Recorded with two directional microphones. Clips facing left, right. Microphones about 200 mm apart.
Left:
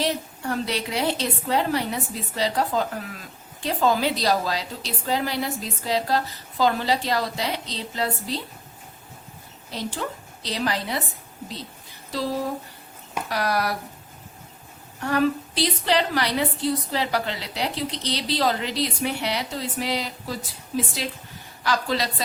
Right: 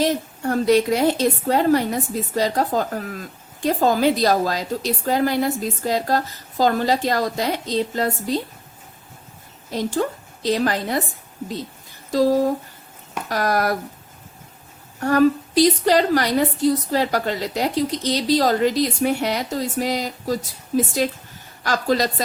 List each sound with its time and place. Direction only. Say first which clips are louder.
0.0 s a woman's voice: right 5 dB; 45° right (ahead or behind)
9.7 s a woman's voice: right 8 dB; 45° right (ahead or behind)
12.1 s a woman's voice: right 9 dB; 45° right (ahead or behind)
15.0 s a woman's voice: right 6 dB; 45° right (ahead or behind)